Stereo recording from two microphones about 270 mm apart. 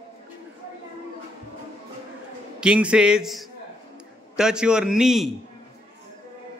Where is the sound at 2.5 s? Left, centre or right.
Centre.